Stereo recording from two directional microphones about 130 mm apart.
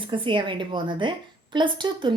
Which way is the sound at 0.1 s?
40° right (ahead or behind).